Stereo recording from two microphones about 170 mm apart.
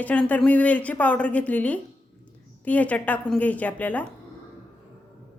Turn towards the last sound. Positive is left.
turn(degrees=10)  # may be behind; listen again after turning